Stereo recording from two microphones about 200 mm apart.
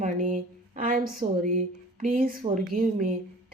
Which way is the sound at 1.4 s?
40° right (ahead or behind).